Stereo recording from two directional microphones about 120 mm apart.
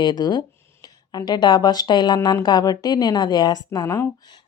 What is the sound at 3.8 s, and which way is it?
Speech, 20° left (ahead or behind).